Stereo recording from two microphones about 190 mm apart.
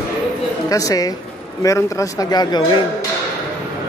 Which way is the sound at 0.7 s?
20° left (ahead or behind).